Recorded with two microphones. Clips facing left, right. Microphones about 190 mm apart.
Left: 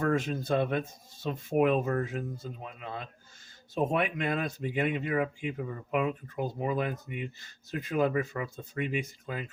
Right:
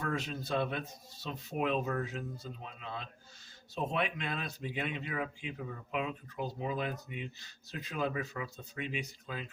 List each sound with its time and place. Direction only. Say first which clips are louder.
0.0 s speech: left 8 dB; 50° left (ahead or behind)